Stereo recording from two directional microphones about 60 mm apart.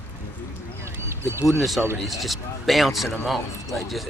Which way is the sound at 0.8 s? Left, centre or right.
Right.